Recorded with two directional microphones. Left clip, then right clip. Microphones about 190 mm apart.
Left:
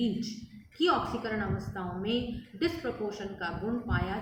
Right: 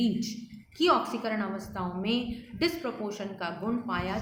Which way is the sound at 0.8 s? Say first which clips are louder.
Right 3 dB; 55° right (ahead or behind).